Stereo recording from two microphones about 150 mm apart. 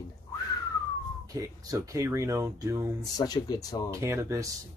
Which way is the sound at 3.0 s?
25° left (ahead or behind).